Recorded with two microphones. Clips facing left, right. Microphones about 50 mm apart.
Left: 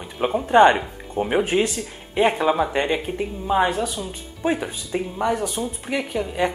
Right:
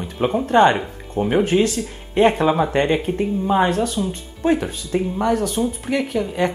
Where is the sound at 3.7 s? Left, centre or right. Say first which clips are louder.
Right 5 dB; centre.